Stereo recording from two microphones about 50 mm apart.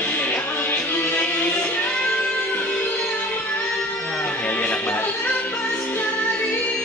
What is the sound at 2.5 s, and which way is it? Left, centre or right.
Music, left.